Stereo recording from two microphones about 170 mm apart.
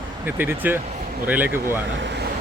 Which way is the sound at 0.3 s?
10° right (ahead or behind).